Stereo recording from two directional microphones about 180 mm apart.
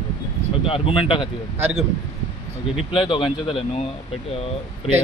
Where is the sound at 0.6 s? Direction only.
30° left (ahead or behind).